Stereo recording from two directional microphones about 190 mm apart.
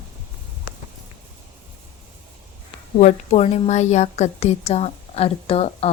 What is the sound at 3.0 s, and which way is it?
A woman's voice, 35° left (ahead or behind).